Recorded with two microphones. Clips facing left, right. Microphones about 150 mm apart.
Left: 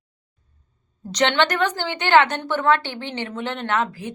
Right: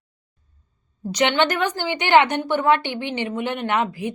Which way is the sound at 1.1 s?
10° right (ahead or behind).